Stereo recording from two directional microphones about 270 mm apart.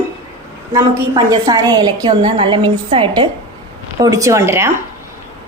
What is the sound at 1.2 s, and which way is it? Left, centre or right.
A woman's voice, centre.